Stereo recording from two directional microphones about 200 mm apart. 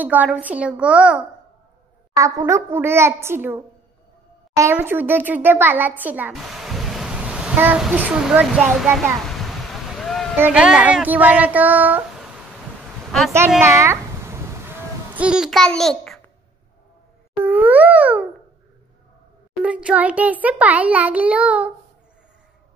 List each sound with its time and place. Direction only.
0.0 s a child's voice: 10° right (ahead or behind)
2.1 s a child's voice: 15° right (ahead or behind)
9.3 s a sound: centre (ahead or behind)
10.4 s a child's voice: 5° right (ahead or behind)
13.6 s a sound: 15° right (ahead or behind); by 16.2 s 5° left (ahead or behind)
17.4 s music: 10° right (ahead or behind)
19.6 s a child's voice: 5° right (ahead or behind)